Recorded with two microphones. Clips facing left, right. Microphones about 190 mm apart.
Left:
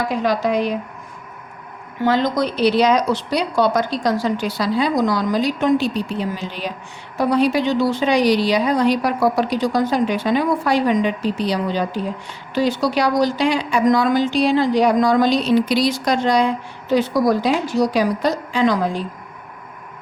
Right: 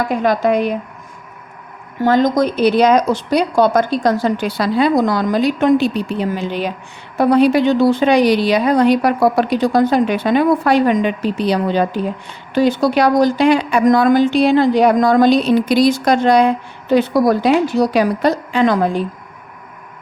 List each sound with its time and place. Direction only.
0.1 s a woman's voice: 55° right (ahead or behind)
2.0 s a woman's voice: 45° right (ahead or behind)